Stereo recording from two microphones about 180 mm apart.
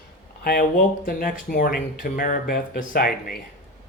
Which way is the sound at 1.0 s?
50° left (ahead or behind).